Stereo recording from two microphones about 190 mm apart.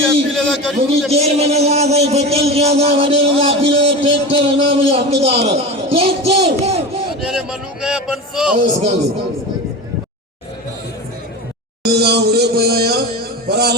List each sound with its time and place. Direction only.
0.1 s a sound: 5° left (ahead or behind)
1.1 s a man's voice: 35° right (ahead or behind)
7.2 s speech: 5° right (ahead or behind)
8.5 s speech: 40° right (ahead or behind)
11.8 s music: 60° right (ahead or behind)
13.5 s a sound: 60° right (ahead or behind)